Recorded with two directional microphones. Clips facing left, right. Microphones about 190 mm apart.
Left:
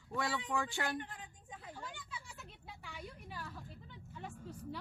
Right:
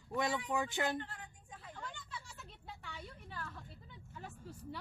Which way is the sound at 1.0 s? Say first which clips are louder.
Even; 15° left (ahead or behind).